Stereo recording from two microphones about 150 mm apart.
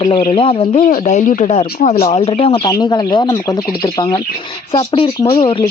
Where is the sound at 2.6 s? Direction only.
20° left (ahead or behind).